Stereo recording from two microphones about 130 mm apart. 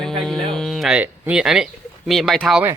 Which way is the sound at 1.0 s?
10° right (ahead or behind).